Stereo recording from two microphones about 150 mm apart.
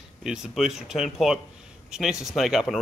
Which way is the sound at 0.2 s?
5° right (ahead or behind).